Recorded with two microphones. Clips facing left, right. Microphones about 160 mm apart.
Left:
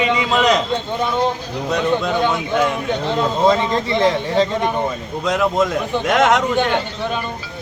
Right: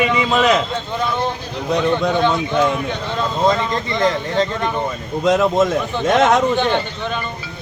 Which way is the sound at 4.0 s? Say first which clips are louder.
Even; 5° left (ahead or behind).